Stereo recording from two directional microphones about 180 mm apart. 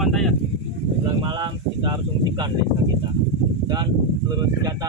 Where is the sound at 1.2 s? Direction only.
25° right (ahead or behind).